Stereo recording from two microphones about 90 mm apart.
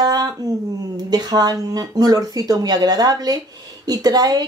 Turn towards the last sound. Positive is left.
turn(degrees=-50)  # may be behind; listen again after turning